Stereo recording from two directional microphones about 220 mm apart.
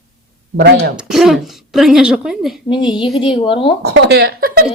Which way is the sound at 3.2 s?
25° left (ahead or behind).